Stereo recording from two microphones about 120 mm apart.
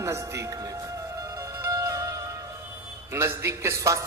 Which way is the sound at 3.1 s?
25° right (ahead or behind).